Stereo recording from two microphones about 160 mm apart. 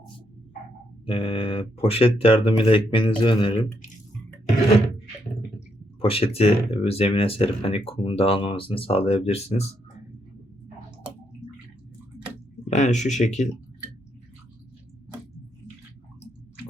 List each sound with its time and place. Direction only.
1.0 s speech: 35° left (ahead or behind)
5.5 s speech: 35° left (ahead or behind)
12.6 s speech: 45° left (ahead or behind)